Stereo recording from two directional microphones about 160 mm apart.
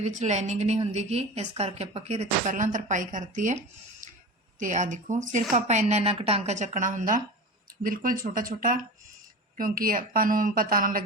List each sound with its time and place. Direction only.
0.0 s a woman's voice: 45° right (ahead or behind)
4.0 s a sound: 55° right (ahead or behind)
4.6 s a woman's voice: 50° right (ahead or behind)